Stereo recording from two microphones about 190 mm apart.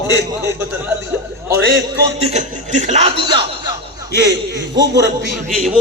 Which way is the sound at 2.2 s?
35° right (ahead or behind).